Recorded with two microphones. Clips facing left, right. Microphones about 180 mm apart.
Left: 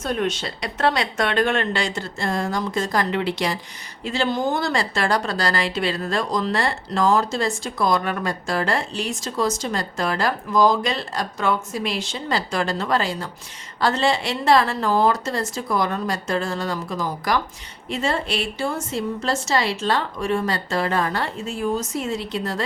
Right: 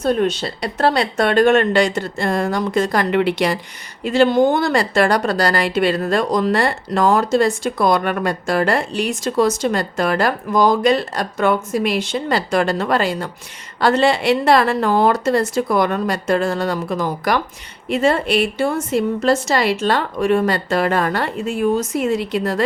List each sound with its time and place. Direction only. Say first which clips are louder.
0.0 s a woman's voice: right 6 dB; 35° right (ahead or behind); by 22.6 s 60° right (ahead or behind)